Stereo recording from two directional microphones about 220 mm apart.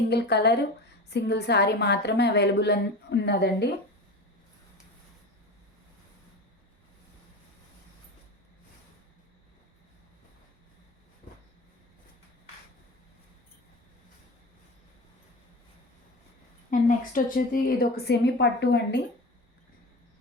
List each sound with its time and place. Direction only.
0.1 s a woman's voice: 50° left (ahead or behind)
16.6 s a woman's voice: 35° left (ahead or behind)